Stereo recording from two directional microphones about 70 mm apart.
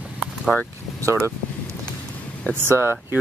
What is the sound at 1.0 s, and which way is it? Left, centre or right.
Speech, right.